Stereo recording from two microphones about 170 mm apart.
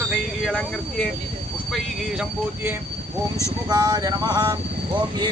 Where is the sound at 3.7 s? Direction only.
25° right (ahead or behind).